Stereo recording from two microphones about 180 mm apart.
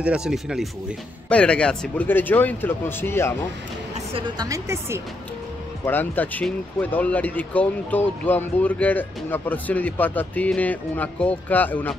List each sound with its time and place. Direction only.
0.0 s speech: 5° right (ahead or behind); by 3.3 s 15° left (ahead or behind)
4.1 s speech: 20° right (ahead or behind)
5.9 s speech: 10° left (ahead or behind)